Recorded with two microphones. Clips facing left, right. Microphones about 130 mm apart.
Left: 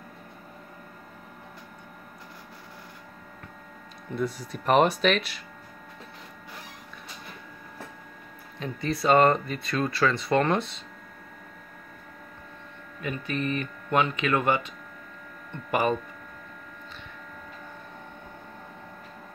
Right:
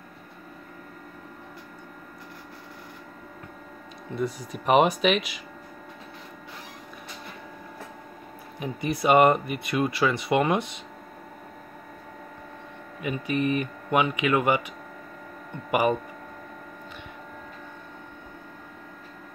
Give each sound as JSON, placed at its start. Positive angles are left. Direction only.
{"t": 4.1, "sound": "speech", "side_deg": 0}
{"t": 8.5, "sound": "speech", "side_deg": -15}
{"t": 13.0, "sound": "speech", "side_deg": -15}
{"t": 15.7, "sound": "speech", "side_deg": -15}